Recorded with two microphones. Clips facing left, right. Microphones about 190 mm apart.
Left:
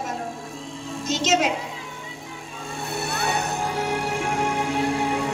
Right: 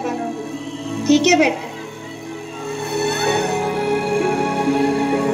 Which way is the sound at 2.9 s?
65° right (ahead or behind).